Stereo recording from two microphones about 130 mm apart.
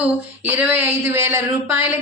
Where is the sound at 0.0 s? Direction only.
10° right (ahead or behind).